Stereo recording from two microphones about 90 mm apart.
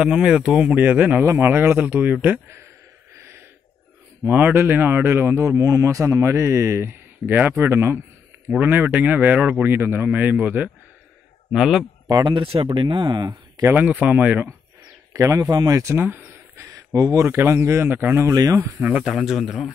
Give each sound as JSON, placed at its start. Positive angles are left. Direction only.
{"t": 0.0, "sound": "a man's voice", "side_deg": -5}
{"t": 3.2, "sound": "a sound", "side_deg": -30}
{"t": 4.3, "sound": "a man's voice", "side_deg": -20}
{"t": 11.5, "sound": "speech", "side_deg": -5}
{"t": 12.1, "sound": "speech", "side_deg": -50}
{"t": 12.6, "sound": "speech", "side_deg": -60}
{"t": 14.0, "sound": "speech", "side_deg": -15}
{"t": 15.1, "sound": "a man's voice", "side_deg": -35}
{"t": 16.0, "sound": "a sound", "side_deg": -20}
{"t": 16.6, "sound": "a man's voice", "side_deg": -40}
{"t": 18.3, "sound": "speech", "side_deg": -45}
{"t": 18.8, "sound": "speech", "side_deg": -15}